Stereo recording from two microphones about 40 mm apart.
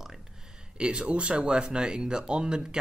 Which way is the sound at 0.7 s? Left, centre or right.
Right.